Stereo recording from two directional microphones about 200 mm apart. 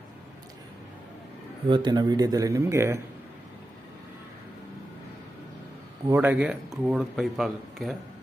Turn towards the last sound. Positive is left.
turn(degrees=0)  # may be behind; listen again after turning